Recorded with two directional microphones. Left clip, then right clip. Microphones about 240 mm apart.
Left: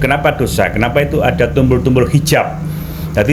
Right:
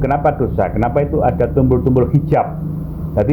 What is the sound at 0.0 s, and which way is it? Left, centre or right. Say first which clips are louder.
Speech: left 2 dB; left.